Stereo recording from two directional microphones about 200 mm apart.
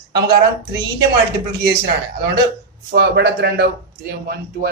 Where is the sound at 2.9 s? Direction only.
55° right (ahead or behind).